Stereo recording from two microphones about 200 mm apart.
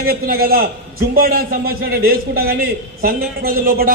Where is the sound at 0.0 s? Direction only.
50° right (ahead or behind).